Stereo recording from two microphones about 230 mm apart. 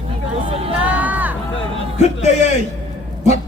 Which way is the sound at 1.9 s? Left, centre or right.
Left.